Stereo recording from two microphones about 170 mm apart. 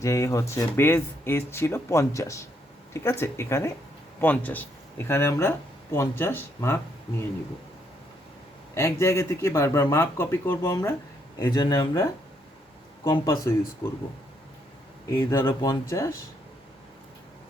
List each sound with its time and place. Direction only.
0.0 s speech: 20° left (ahead or behind)
8.7 s speech: 15° left (ahead or behind)
13.1 s speech: 25° left (ahead or behind)
15.1 s speech: 25° left (ahead or behind)